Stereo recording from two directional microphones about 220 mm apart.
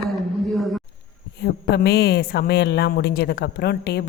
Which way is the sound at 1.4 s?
50° left (ahead or behind).